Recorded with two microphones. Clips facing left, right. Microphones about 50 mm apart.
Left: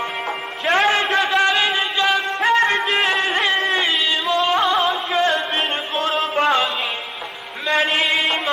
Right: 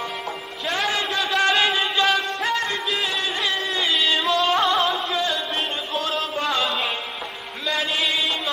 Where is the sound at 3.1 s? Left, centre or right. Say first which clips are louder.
Left 6 dB; left.